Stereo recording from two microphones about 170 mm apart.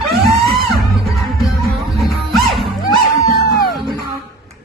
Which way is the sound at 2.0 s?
Centre (ahead or behind).